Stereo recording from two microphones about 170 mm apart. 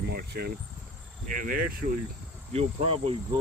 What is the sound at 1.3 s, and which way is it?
Speech, 55° right (ahead or behind).